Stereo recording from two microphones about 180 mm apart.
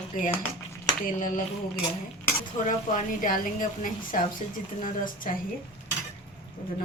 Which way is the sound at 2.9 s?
45° left (ahead or behind).